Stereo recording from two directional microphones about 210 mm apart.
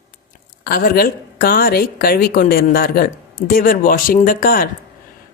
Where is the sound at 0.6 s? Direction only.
45° left (ahead or behind).